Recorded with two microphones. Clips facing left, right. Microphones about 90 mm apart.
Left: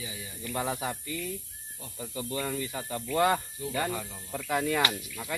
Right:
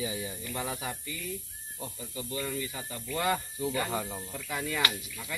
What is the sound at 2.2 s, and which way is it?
Speech, 40° left (ahead or behind).